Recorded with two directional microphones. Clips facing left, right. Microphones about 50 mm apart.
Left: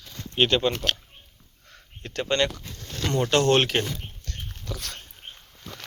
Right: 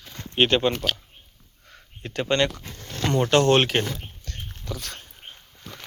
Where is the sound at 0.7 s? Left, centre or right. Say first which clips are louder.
Even; centre.